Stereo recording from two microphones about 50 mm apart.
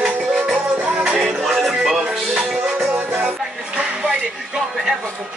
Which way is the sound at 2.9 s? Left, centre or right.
Right.